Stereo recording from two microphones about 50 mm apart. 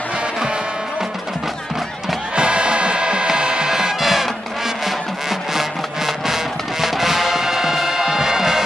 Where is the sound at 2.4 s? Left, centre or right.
Centre.